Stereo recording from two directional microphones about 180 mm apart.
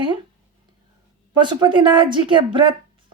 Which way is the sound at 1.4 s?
25° right (ahead or behind).